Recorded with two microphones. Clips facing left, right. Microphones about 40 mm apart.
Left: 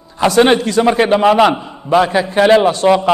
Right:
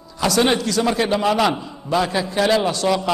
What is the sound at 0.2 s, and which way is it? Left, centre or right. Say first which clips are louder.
A man's voice: left 7 dB; left.